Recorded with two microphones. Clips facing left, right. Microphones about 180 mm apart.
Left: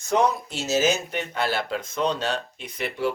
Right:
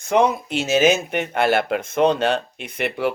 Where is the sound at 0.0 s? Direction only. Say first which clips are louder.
Right 4 dB; 60° right (ahead or behind).